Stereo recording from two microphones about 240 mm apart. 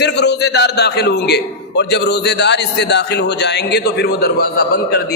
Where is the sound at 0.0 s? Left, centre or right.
Left.